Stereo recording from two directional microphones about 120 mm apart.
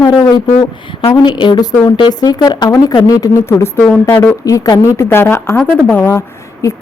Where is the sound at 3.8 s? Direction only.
10° left (ahead or behind).